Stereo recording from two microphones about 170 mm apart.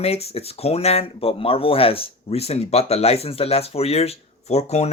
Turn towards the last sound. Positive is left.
turn(degrees=40)  # may be behind; listen again after turning